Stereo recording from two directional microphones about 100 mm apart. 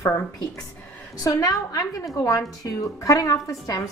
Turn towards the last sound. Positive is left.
turn(degrees=35)  # may be behind; listen again after turning